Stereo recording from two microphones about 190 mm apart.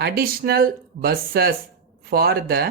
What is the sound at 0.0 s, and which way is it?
Speech, 55° right (ahead or behind).